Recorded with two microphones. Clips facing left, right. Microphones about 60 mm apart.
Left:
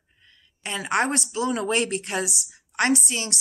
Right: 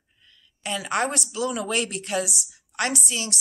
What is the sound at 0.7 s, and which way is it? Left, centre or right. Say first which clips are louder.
A woman's voice: left 1 dB; left.